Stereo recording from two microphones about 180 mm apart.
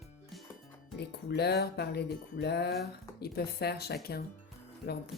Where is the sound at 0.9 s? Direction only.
65° left (ahead or behind).